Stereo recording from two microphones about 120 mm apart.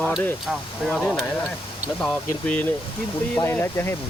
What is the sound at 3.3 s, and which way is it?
Speech, 20° left (ahead or behind).